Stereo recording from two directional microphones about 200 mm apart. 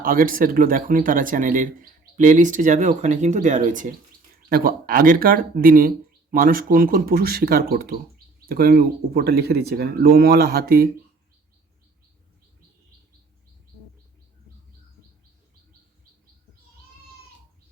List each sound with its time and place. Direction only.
0.0 s speech: 45° right (ahead or behind)